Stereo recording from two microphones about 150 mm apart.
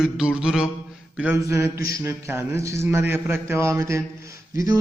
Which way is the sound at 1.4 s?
20° right (ahead or behind).